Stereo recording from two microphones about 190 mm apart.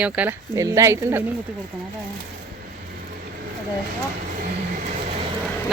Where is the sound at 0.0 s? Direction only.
10° right (ahead or behind).